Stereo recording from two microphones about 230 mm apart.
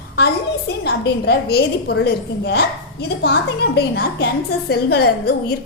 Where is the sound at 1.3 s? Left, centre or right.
Left.